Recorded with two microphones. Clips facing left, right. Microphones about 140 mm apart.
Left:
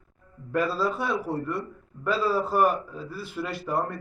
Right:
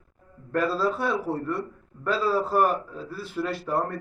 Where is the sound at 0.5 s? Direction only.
Centre (ahead or behind).